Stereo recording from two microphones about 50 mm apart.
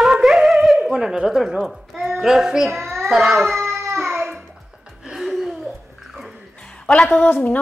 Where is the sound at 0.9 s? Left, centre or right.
Centre.